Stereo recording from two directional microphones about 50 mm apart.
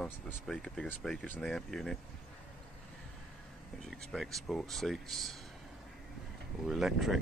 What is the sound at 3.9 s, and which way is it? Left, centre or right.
Speech, centre.